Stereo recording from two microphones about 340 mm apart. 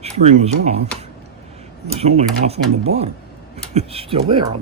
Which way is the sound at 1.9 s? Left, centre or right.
Centre.